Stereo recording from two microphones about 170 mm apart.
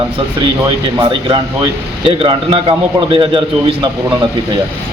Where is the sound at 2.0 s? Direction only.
30° right (ahead or behind).